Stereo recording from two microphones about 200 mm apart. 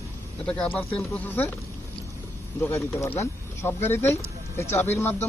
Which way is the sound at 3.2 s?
10° left (ahead or behind).